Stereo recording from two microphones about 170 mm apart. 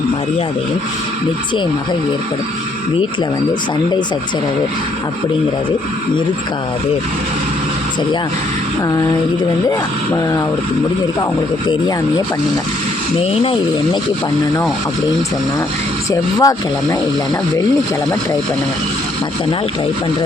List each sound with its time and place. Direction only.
13.1 s speech: 35° left (ahead or behind)
16.4 s speech: 20° left (ahead or behind)